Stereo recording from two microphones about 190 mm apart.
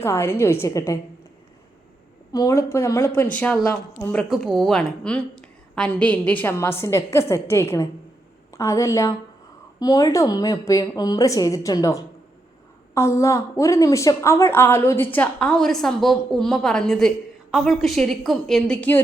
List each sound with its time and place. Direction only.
0.0 s a woman's voice: 15° left (ahead or behind)
2.3 s a woman's voice: 15° left (ahead or behind)